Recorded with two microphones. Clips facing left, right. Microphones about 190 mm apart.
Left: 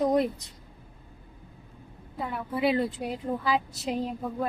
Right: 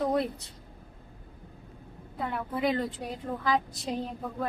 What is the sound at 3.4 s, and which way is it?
Speech, 10° left (ahead or behind).